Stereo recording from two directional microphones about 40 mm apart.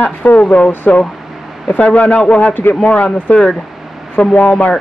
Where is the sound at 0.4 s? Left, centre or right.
Left.